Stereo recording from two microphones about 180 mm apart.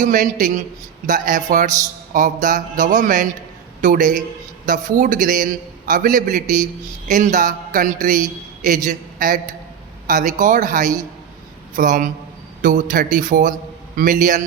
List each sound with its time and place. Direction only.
0.0 s a man's voice: 45° right (ahead or behind)